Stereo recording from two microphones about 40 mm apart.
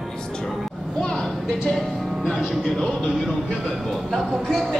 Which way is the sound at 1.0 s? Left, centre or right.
Left.